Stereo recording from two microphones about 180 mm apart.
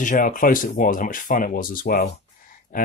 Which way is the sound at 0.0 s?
45° left (ahead or behind).